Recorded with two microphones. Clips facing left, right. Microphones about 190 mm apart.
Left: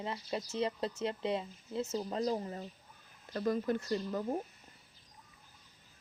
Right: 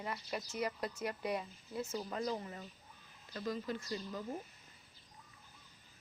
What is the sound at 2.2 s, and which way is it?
Speech, 35° left (ahead or behind).